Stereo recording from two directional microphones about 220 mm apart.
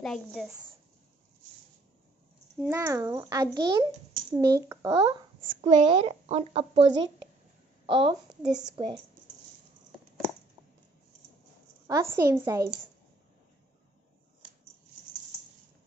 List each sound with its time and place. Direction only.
0.0 s a woman's voice: centre (ahead or behind)
0.5 s speech: 15° right (ahead or behind)
2.6 s a child's voice: 10° right (ahead or behind)
5.6 s a woman's voice: 30° right (ahead or behind)
7.8 s a woman's voice: 20° right (ahead or behind)
8.5 s a woman's voice: 30° right (ahead or behind)
11.9 s a child's voice: 10° right (ahead or behind)